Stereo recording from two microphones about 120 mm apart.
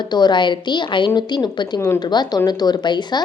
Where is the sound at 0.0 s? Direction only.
35° left (ahead or behind).